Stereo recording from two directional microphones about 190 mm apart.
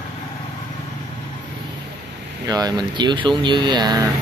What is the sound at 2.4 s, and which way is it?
Speech, 20° right (ahead or behind).